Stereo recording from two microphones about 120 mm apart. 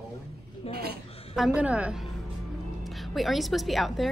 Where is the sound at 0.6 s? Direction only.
55° left (ahead or behind).